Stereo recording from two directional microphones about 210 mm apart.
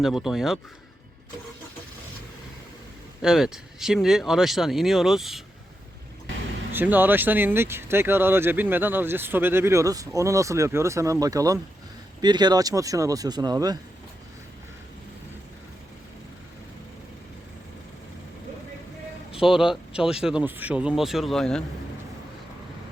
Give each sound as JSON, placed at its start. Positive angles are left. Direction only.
{"t": 0.0, "sound": "speech", "side_deg": 0}
{"t": 3.2, "sound": "speech", "side_deg": 0}
{"t": 6.7, "sound": "speech", "side_deg": -10}
{"t": 19.5, "sound": "speech", "side_deg": 0}